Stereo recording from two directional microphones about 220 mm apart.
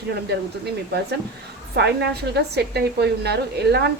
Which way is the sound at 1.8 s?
50° right (ahead or behind).